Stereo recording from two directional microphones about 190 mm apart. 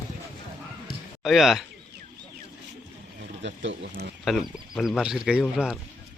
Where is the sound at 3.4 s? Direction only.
70° right (ahead or behind).